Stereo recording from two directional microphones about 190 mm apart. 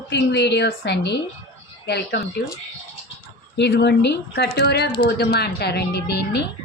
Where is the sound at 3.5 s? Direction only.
65° left (ahead or behind).